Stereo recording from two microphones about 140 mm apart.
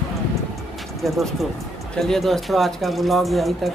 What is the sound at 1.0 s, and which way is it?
Speech, centre (ahead or behind).